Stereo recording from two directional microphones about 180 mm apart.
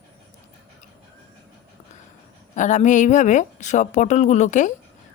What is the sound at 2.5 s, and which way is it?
Speech, 45° left (ahead or behind).